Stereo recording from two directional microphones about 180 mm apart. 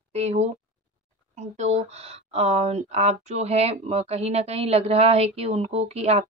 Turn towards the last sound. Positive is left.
turn(degrees=-35)  # may be behind; listen again after turning